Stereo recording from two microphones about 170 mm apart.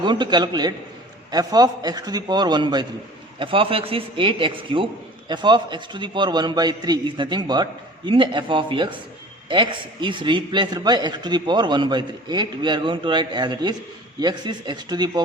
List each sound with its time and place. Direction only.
0.0 s a man's voice: 25° right (ahead or behind)